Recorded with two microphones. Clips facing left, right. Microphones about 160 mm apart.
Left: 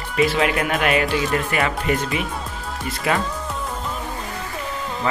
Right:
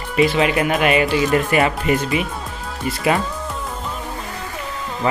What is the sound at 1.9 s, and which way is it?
Speech, 5° right (ahead or behind).